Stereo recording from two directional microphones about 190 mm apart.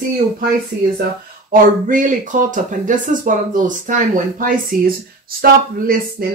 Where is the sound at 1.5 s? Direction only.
45° right (ahead or behind).